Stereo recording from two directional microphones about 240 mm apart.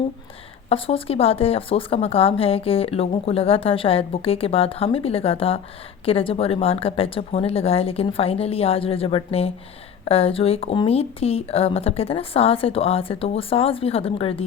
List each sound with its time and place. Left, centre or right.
0.7 s speech: left